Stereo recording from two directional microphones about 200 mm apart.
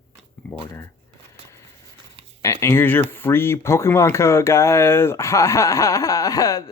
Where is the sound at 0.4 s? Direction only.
5° left (ahead or behind).